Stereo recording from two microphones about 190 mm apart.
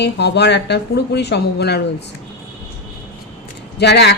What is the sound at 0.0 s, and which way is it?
A woman's voice, 60° left (ahead or behind).